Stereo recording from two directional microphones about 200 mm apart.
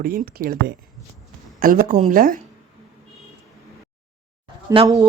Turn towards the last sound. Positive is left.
turn(degrees=-15)  # may be behind; listen again after turning